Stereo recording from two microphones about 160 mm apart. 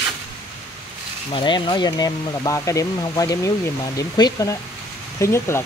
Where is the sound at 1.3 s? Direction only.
30° left (ahead or behind).